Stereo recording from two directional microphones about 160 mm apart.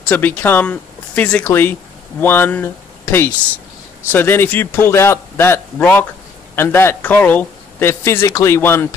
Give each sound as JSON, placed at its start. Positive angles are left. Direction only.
{"t": 0.1, "sound": "speech", "side_deg": 10}